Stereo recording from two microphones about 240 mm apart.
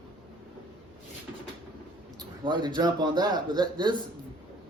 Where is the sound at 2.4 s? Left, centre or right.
Centre.